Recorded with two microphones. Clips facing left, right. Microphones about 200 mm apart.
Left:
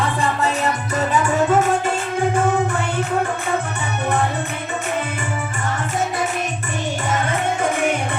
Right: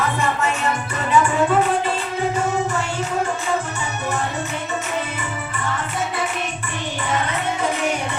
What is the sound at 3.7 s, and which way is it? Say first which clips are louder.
Music: left 3 dB; 60° left (ahead or behind).